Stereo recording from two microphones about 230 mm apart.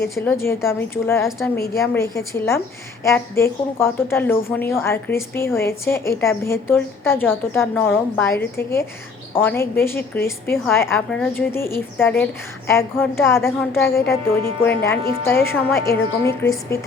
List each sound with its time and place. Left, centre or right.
0.3 s a woman's voice: centre
1.5 s a woman's voice: left
1.8 s a woman's voice: centre